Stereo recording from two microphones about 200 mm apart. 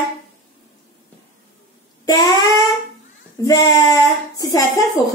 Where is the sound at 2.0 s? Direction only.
20° left (ahead or behind).